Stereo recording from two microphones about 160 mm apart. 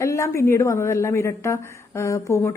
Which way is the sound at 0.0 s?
20° left (ahead or behind).